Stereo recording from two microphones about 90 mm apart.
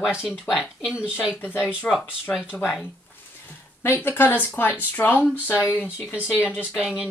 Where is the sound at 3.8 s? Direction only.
25° left (ahead or behind).